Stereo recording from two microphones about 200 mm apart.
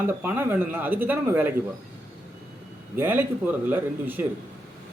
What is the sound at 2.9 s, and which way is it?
Speech, 10° right (ahead or behind).